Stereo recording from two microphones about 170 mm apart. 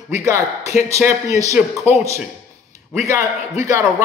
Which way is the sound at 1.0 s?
20° right (ahead or behind).